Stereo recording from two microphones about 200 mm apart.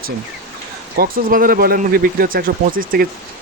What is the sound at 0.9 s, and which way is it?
Speech, 45° right (ahead or behind).